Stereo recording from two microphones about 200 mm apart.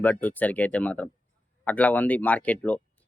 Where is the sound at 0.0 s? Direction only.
10° left (ahead or behind).